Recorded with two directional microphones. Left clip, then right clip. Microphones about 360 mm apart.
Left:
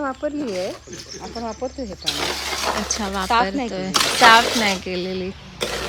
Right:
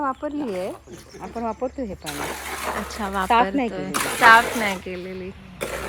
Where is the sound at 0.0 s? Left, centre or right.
Right.